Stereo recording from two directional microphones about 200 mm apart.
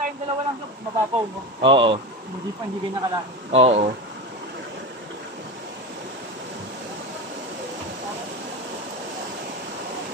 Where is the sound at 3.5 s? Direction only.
35° right (ahead or behind).